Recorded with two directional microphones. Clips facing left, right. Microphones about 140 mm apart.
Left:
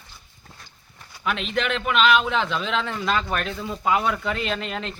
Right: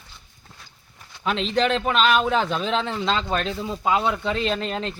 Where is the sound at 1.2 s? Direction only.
30° right (ahead or behind).